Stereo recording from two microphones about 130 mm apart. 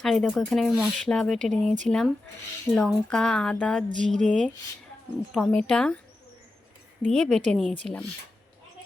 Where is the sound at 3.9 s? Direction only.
75° right (ahead or behind).